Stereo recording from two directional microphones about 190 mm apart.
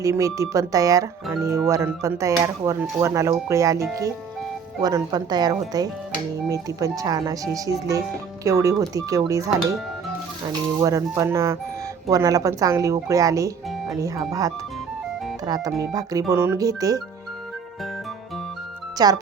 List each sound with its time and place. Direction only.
0.0 s speech: 15° right (ahead or behind)
10.8 s speech: 15° right (ahead or behind)
19.0 s speech: 20° right (ahead or behind)